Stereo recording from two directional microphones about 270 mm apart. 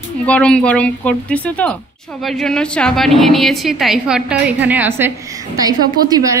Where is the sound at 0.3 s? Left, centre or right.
Centre.